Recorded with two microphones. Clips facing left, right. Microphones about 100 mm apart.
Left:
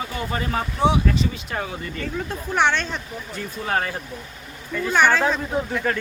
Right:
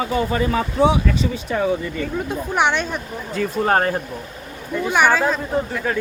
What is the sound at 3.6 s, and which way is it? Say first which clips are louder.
Speech: right 6 dB; 45° right (ahead or behind).